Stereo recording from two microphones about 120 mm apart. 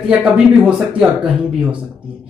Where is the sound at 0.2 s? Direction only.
10° right (ahead or behind).